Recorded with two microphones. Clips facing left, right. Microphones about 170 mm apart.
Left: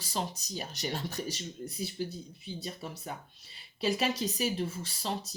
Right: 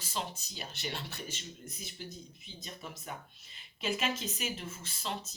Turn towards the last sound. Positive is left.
turn(degrees=35)  # may be behind; listen again after turning